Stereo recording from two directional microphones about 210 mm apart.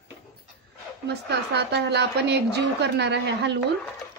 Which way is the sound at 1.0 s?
55° right (ahead or behind).